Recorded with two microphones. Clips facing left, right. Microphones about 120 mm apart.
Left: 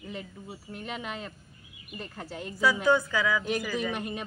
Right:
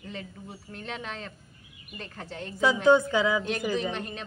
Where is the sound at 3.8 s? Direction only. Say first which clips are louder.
Even; 10° left (ahead or behind).